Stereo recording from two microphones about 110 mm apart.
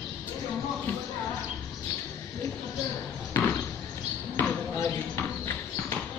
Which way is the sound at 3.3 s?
20° left (ahead or behind).